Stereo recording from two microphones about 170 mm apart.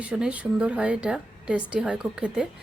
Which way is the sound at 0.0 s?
5° right (ahead or behind).